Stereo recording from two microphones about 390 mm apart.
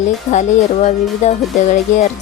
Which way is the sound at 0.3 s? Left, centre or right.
Centre.